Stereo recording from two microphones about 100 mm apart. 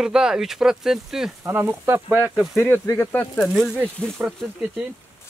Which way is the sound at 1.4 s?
25° right (ahead or behind).